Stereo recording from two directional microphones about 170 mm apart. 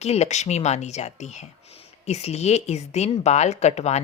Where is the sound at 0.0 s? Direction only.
40° left (ahead or behind).